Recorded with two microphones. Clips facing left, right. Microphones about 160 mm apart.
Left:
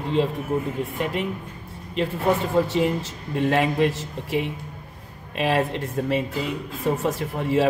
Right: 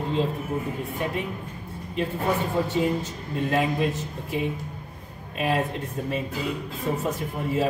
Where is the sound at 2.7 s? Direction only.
75° left (ahead or behind).